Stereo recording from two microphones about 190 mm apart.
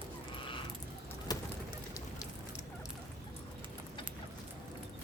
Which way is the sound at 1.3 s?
20° left (ahead or behind).